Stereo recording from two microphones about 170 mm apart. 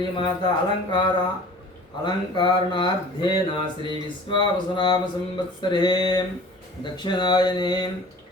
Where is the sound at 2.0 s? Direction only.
25° left (ahead or behind).